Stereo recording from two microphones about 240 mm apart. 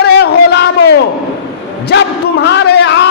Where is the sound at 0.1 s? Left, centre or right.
Left.